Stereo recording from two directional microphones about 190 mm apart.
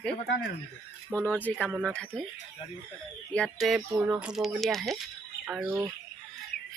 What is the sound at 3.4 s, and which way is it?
Speech, 5° left (ahead or behind).